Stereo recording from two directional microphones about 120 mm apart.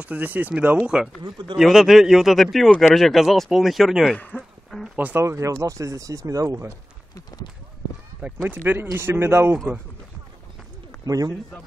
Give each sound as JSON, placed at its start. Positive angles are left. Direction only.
{"t": 0.0, "sound": "speech", "side_deg": -15}
{"t": 1.6, "sound": "speech", "side_deg": 0}
{"t": 4.2, "sound": "speech", "side_deg": 15}
{"t": 4.6, "sound": "speech", "side_deg": 0}
{"t": 4.9, "sound": "speech", "side_deg": -15}
{"t": 5.2, "sound": "speech", "side_deg": -25}
{"t": 7.2, "sound": "clip-clop", "side_deg": 35}
{"t": 8.2, "sound": "speech", "side_deg": -15}
{"t": 11.1, "sound": "a man's voice", "side_deg": -30}